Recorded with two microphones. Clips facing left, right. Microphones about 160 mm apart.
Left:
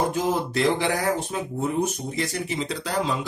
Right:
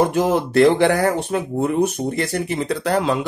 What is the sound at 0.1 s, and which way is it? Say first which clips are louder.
Speech: right 7 dB; 65° right (ahead or behind).